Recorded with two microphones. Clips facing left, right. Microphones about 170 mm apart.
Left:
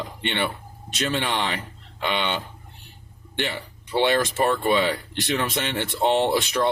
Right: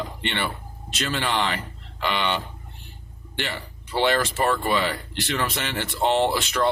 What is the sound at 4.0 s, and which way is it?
Speech, 20° left (ahead or behind).